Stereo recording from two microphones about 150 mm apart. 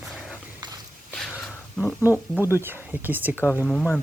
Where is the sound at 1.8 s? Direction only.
15° left (ahead or behind).